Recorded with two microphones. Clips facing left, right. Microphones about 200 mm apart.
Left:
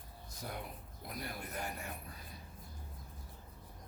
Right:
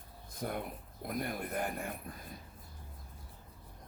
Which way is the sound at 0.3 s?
50° right (ahead or behind).